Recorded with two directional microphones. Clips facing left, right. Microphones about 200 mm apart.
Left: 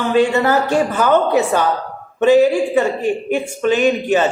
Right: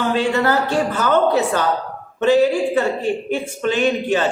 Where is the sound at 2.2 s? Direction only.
15° left (ahead or behind).